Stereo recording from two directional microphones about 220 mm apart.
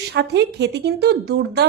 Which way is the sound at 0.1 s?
50° right (ahead or behind).